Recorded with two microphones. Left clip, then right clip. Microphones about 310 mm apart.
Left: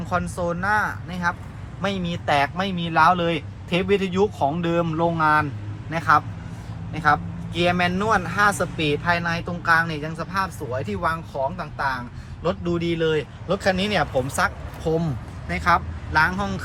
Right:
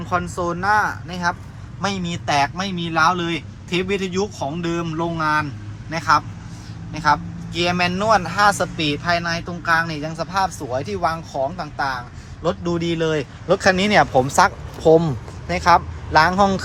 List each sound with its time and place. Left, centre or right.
0.0 s speech: centre